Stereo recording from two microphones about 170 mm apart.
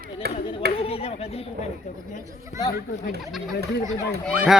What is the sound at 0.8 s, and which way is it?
Chatter, 35° left (ahead or behind).